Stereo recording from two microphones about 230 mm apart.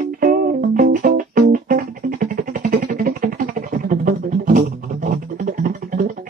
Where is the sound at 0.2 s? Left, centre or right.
Right.